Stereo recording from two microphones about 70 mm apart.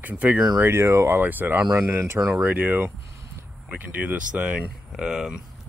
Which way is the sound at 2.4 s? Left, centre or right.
Right.